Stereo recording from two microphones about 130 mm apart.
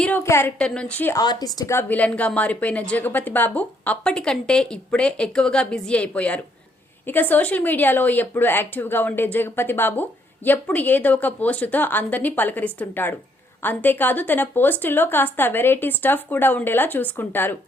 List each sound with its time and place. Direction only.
0.2 s a woman's voice: 20° left (ahead or behind)
0.6 s speech: 10° left (ahead or behind)
1.1 s a woman's voice: 30° left (ahead or behind)
1.9 s speech: 10° left (ahead or behind)